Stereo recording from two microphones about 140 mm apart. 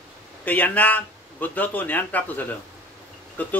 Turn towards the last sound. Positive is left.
turn(degrees=10)  # may be behind; listen again after turning